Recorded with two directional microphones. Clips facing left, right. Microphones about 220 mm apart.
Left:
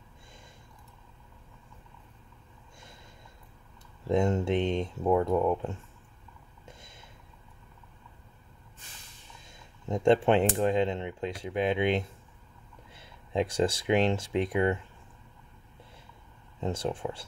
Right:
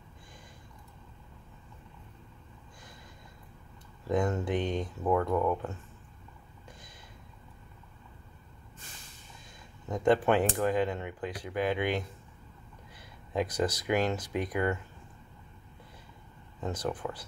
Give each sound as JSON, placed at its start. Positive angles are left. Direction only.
{"t": 4.1, "sound": "speech", "side_deg": 25}
{"t": 9.8, "sound": "speech", "side_deg": 25}
{"t": 16.6, "sound": "speech", "side_deg": 25}